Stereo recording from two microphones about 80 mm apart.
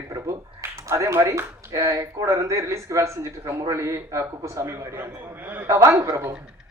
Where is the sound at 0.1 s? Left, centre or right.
Right.